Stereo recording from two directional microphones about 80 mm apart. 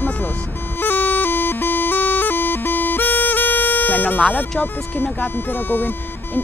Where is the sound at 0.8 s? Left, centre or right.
Left.